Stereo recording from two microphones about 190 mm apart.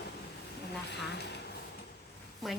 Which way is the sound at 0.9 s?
60° left (ahead or behind).